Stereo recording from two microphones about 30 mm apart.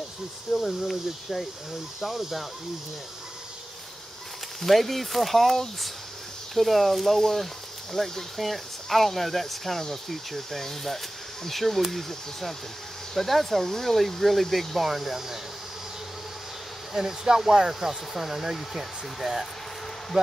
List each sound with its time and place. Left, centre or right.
0.6 s speech: centre
4.6 s speech: centre
14.9 s speech: centre
16.9 s speech: centre
17.7 s speech: centre